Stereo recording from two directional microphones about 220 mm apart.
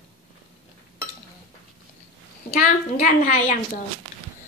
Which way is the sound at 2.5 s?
40° left (ahead or behind).